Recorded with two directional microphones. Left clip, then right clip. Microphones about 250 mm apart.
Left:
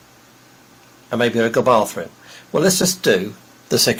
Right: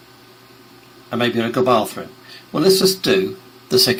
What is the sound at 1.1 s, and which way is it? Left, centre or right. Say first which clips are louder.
Speech: left 3 dB; centre.